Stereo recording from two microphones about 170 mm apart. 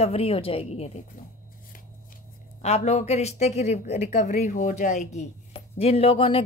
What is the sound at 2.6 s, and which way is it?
A woman's voice, 40° left (ahead or behind).